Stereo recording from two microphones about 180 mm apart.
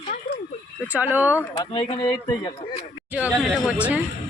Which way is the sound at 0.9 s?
10° right (ahead or behind).